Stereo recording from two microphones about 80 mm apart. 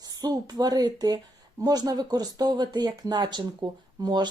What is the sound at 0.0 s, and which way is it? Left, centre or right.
A woman's voice, right.